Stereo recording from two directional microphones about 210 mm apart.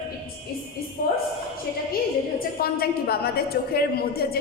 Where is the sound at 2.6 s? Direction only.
45° left (ahead or behind).